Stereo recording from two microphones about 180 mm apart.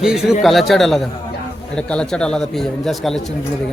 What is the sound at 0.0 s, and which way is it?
A man's voice, 5° right (ahead or behind).